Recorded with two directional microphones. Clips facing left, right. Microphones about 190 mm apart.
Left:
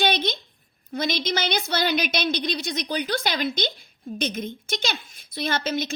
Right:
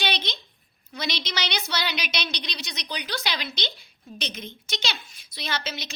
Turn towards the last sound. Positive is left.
turn(degrees=50)  # may be behind; listen again after turning